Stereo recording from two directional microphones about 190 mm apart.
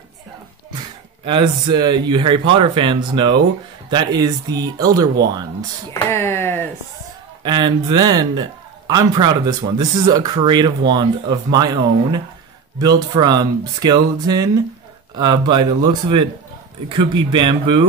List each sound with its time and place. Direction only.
1.2 s a man's voice: 25° right (ahead or behind)
5.9 s a sound: 15° left (ahead or behind)
7.4 s a man's voice: 25° right (ahead or behind)